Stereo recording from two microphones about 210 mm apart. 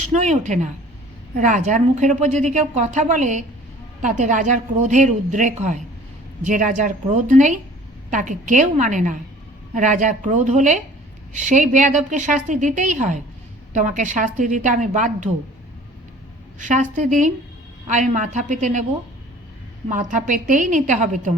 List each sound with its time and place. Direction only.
0.1 s a woman's voice: 35° right (ahead or behind)
16.6 s a woman's voice: 35° right (ahead or behind)
19.9 s a woman's voice: 35° right (ahead or behind)